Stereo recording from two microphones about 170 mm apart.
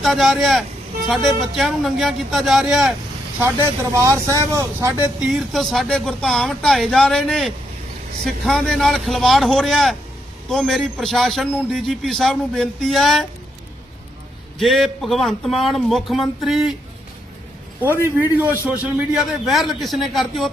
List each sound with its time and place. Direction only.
0.0 s a man's voice: centre (ahead or behind)
3.4 s speech: 15° right (ahead or behind)
5.2 s a man's voice: centre (ahead or behind)
14.6 s a man's voice: centre (ahead or behind)
18.9 s a man's voice: centre (ahead or behind)